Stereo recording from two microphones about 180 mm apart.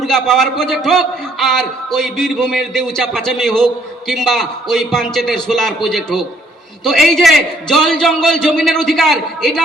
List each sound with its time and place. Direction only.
0.0 s a man's voice: centre (ahead or behind)